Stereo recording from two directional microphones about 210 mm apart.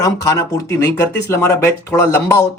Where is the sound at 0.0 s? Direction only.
15° left (ahead or behind).